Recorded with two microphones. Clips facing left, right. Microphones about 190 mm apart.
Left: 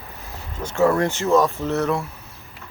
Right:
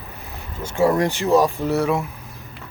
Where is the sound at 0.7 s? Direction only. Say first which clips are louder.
Even; 10° right (ahead or behind).